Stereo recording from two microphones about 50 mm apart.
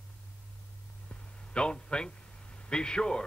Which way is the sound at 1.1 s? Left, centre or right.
Centre.